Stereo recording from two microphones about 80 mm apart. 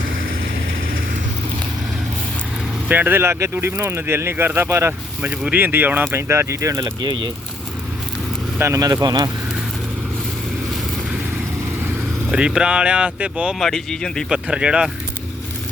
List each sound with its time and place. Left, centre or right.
2.9 s speech: right
6.1 s speech: right
7.0 s speech: right
8.5 s speech: right
8.8 s speech: right
12.3 s speech: centre
13.6 s speech: centre
14.3 s speech: centre